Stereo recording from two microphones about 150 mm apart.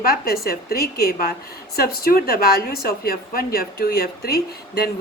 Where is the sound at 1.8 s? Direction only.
85° left.